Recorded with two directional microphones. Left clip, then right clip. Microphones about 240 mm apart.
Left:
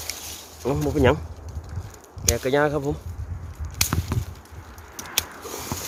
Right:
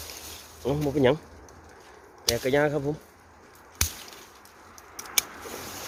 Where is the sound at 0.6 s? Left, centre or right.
Centre.